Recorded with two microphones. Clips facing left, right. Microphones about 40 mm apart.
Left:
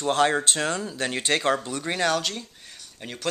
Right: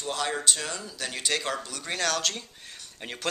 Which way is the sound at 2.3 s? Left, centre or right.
Centre.